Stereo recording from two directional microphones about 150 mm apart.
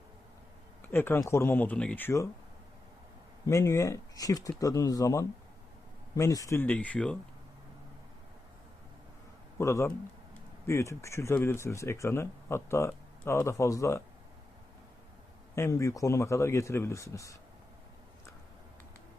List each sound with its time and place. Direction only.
0.8 s speech: 15° left (ahead or behind)
3.4 s speech: 20° left (ahead or behind)
6.7 s speech: 10° left (ahead or behind)
9.6 s speech: 20° left (ahead or behind)
15.5 s speech: 20° left (ahead or behind)